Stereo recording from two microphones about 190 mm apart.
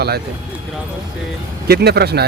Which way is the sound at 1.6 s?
55° right (ahead or behind).